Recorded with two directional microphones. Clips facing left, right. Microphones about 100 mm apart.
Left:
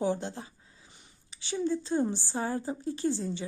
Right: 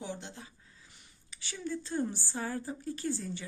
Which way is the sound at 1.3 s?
25° left (ahead or behind).